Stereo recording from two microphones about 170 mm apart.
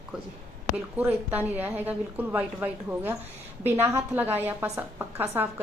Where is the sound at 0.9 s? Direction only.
10° right (ahead or behind).